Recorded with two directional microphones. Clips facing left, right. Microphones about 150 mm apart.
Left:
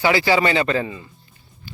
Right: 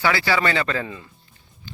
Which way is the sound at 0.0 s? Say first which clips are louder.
Left 4 dB; 15° left (ahead or behind).